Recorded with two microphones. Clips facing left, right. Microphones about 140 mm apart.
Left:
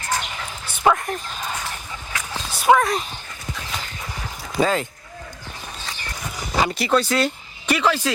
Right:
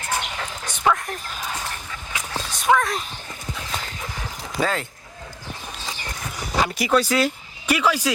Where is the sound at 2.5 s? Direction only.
5° left (ahead or behind).